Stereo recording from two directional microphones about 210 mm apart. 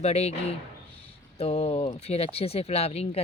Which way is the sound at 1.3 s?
30° left (ahead or behind).